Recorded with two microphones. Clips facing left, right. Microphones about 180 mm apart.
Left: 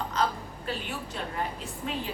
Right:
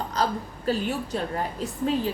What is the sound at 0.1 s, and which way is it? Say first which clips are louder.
A woman's voice: right 4 dB; 40° right (ahead or behind).